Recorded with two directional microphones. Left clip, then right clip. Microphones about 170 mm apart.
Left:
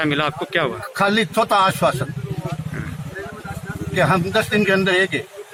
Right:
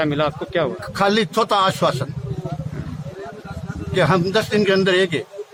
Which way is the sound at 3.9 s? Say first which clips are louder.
Even; 25° right (ahead or behind).